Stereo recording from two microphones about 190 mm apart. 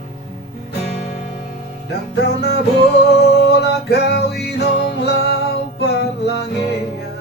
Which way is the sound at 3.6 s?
60° left (ahead or behind).